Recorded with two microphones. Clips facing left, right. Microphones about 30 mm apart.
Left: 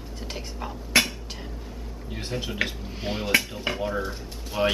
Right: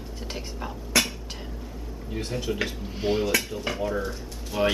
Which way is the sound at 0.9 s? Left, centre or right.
Left.